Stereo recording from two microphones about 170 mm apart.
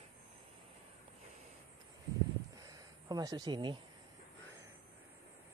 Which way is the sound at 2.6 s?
20° right (ahead or behind).